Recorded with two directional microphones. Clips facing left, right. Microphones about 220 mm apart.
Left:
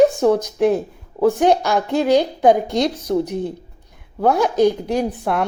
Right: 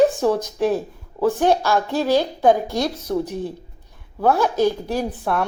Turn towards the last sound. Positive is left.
turn(degrees=15)  # may be behind; listen again after turning